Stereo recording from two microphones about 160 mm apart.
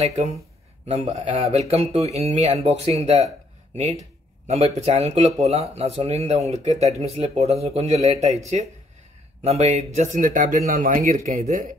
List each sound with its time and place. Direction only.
0.0 s speech: 40° right (ahead or behind)
9.4 s speech: 40° right (ahead or behind)